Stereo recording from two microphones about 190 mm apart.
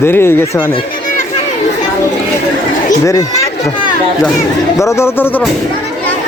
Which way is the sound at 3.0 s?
15° left (ahead or behind).